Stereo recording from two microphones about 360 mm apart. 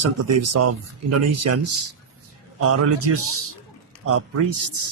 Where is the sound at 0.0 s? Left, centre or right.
Right.